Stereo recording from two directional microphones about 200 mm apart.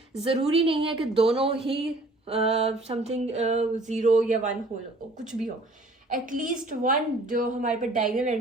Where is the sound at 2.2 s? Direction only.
30° right (ahead or behind).